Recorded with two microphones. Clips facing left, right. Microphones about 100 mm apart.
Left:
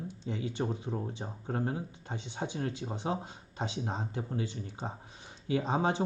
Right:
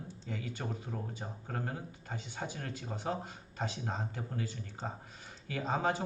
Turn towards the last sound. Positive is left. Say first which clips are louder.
# left 4 dB
turn(degrees=25)  # may be behind; listen again after turning